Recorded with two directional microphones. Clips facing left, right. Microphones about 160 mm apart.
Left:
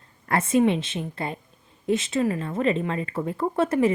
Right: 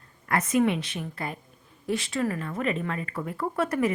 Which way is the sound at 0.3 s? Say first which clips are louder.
Left 3 dB; 25° left (ahead or behind).